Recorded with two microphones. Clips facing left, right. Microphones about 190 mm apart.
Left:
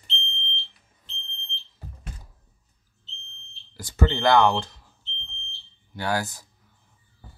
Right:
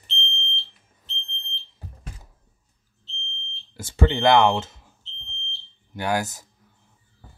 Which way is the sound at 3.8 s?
25° right (ahead or behind).